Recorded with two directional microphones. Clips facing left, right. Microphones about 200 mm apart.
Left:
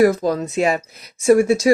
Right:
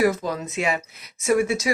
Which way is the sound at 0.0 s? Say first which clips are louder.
Left 6 dB; 35° left (ahead or behind).